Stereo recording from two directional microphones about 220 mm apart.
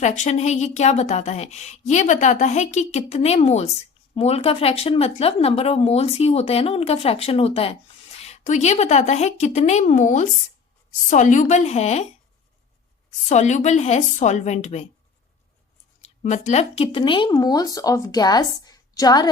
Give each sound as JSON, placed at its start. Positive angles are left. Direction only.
{"t": 0.0, "sound": "speech", "side_deg": 30}
{"t": 13.1, "sound": "speech", "side_deg": 30}
{"t": 16.2, "sound": "speech", "side_deg": 35}